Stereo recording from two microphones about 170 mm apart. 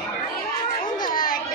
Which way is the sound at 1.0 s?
55° left (ahead or behind).